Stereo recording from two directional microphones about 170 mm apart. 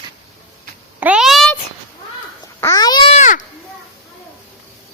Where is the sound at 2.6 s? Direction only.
20° left (ahead or behind).